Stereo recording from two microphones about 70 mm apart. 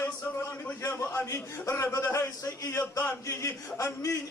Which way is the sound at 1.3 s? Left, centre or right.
Left.